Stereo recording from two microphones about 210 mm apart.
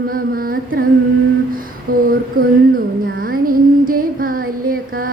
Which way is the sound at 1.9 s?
45° right (ahead or behind).